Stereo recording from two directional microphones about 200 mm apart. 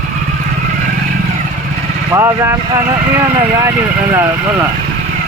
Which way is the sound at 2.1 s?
15° right (ahead or behind).